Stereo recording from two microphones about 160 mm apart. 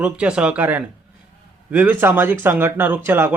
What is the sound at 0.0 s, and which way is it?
Speech, 5° right (ahead or behind).